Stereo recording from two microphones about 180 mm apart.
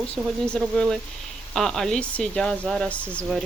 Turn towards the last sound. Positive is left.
turn(degrees=5)  # may be behind; listen again after turning